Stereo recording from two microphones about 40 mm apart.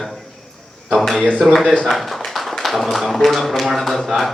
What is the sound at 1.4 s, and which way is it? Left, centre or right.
Speech, centre.